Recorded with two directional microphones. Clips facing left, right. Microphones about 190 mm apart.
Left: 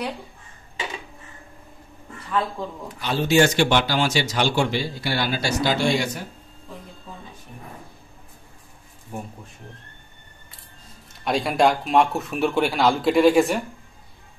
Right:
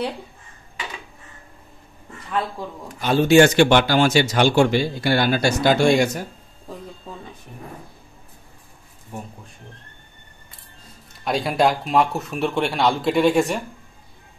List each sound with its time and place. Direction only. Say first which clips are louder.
3.0 s speech: right 5 dB; 50° right (ahead or behind)
11.2 s speech: even; centre (ahead or behind)